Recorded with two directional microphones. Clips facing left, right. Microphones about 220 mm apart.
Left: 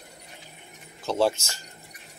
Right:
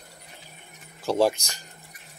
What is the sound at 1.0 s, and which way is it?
Speech, 15° right (ahead or behind).